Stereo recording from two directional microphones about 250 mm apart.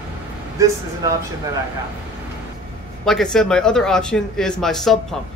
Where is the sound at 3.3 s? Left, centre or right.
Centre.